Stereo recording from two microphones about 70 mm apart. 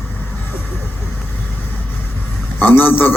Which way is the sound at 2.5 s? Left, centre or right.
Left.